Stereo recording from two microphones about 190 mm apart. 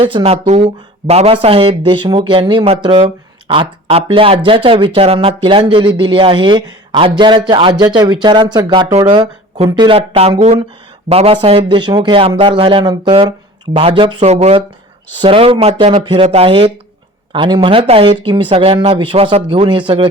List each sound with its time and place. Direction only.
0.0 s speech: 30° right (ahead or behind)